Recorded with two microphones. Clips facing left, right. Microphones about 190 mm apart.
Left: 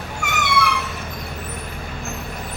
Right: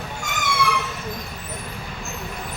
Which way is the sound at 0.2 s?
65° left (ahead or behind).